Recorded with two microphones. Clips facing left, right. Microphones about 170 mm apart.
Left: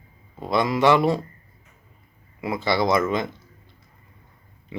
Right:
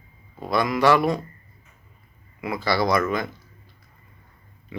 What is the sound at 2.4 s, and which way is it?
Speech, 25° left (ahead or behind).